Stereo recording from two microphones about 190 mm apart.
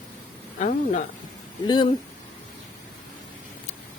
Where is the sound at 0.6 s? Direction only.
40° left (ahead or behind).